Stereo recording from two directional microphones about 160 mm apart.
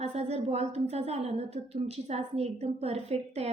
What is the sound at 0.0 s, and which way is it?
A woman's voice, 40° right (ahead or behind).